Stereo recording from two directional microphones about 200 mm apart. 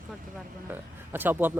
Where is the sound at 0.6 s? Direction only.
10° right (ahead or behind).